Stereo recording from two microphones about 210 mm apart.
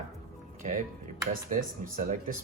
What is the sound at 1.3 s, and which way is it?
Speech, 40° right (ahead or behind).